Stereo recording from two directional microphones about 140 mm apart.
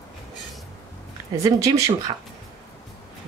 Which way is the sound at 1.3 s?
25° right (ahead or behind).